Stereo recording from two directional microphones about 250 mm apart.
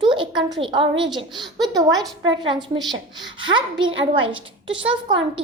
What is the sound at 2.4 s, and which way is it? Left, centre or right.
A child's voice, centre.